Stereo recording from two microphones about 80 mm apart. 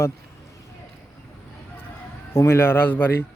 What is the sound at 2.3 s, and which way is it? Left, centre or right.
Speech, left.